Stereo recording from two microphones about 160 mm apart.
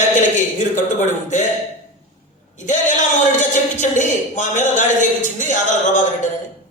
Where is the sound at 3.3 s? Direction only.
50° left (ahead or behind).